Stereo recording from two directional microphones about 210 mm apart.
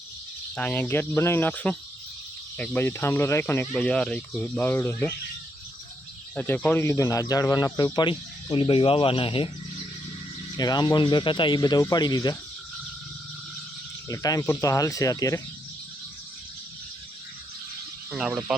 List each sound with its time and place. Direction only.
0.5 s speech: 5° left (ahead or behind)
6.3 s speech: 10° left (ahead or behind); by 9.5 s 25° left (ahead or behind)
10.6 s speech: 20° left (ahead or behind)
14.1 s speech: 15° left (ahead or behind)
18.1 s speech: centre (ahead or behind)